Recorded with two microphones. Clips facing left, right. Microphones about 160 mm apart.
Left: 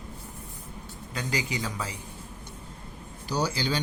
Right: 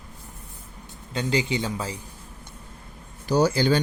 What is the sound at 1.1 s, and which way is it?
Speech, 25° right (ahead or behind).